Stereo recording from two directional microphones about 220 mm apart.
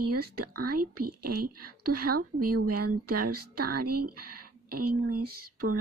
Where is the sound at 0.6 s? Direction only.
90° right.